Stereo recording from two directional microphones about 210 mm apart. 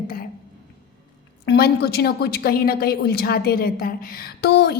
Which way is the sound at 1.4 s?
50° left (ahead or behind).